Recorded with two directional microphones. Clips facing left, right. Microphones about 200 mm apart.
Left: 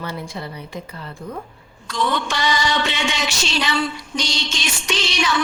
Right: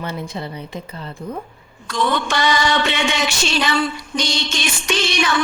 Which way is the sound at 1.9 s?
50° right (ahead or behind).